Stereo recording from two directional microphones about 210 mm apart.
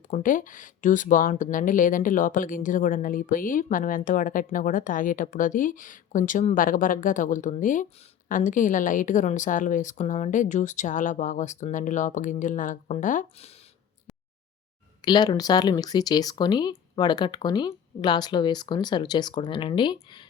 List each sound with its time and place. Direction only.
0.1 s speech: 40° left (ahead or behind)
15.0 s speech: 20° left (ahead or behind)